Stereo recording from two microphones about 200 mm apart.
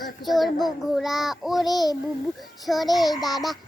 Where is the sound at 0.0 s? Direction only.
Centre (ahead or behind).